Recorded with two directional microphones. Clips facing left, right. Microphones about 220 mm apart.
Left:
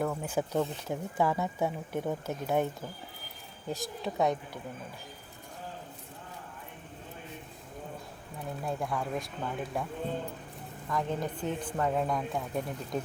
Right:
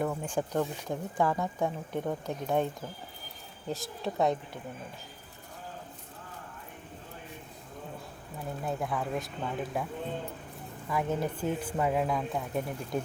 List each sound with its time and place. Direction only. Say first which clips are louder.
0.0 s speech: even; centre (ahead or behind)
3.7 s speech: even; centre (ahead or behind)
8.6 s speech: right 1 dB; centre (ahead or behind)
10.8 s speech: right 2 dB; 5° right (ahead or behind)